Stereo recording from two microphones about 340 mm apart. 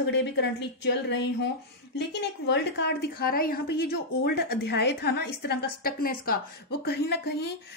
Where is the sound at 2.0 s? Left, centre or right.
Left.